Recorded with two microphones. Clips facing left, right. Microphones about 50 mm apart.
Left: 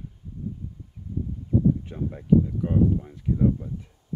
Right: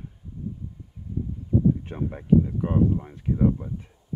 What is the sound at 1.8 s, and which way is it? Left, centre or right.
Speech, right.